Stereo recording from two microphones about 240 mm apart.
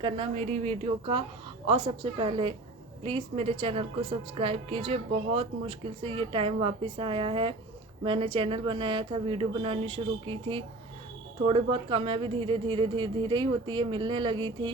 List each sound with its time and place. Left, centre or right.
0.0 s a woman's voice: right